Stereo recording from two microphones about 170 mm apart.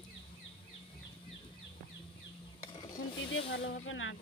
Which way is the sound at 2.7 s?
25° left (ahead or behind).